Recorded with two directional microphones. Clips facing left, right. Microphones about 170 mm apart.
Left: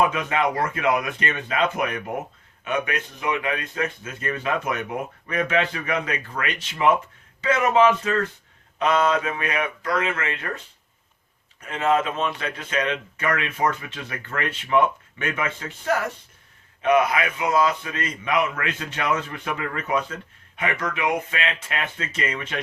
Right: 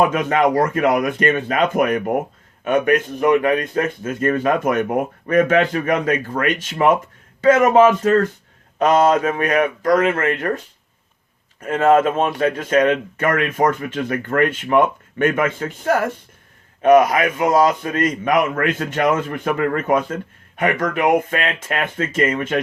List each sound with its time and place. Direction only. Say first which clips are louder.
0.1 s speech: right 7 dB; 45° right (ahead or behind)
11.6 s speech: right 8 dB; 50° right (ahead or behind)